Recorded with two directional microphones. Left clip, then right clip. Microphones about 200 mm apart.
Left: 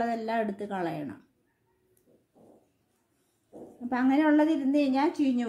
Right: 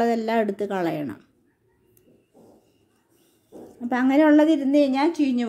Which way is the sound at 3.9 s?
40° right (ahead or behind).